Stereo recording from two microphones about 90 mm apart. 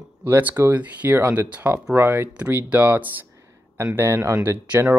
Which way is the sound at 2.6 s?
25° right (ahead or behind).